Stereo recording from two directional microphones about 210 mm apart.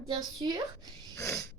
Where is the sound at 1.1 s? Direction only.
10° left (ahead or behind).